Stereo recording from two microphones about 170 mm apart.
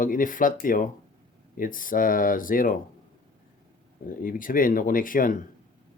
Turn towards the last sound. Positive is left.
turn(degrees=55)  # may be behind; listen again after turning